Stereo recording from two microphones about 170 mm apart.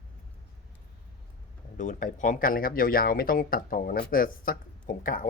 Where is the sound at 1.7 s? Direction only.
50° left (ahead or behind).